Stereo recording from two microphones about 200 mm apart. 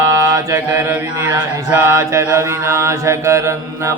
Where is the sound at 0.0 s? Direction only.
15° right (ahead or behind).